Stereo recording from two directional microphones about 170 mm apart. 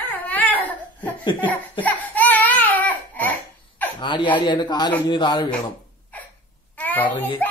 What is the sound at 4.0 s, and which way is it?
Speech, 25° left (ahead or behind).